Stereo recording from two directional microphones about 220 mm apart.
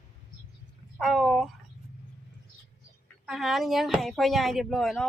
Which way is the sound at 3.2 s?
Centre (ahead or behind).